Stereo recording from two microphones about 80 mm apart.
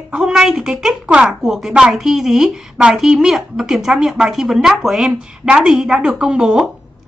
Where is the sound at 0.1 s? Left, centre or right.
Centre.